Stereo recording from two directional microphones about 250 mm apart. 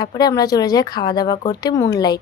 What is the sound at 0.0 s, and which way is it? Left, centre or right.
Speech, centre.